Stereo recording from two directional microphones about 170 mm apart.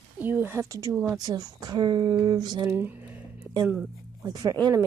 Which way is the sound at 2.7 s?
10° right (ahead or behind).